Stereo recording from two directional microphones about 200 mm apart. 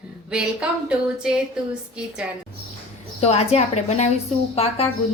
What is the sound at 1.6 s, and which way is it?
Speech, 5° right (ahead or behind).